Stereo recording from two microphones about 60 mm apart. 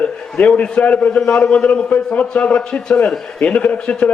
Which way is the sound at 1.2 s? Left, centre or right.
Centre.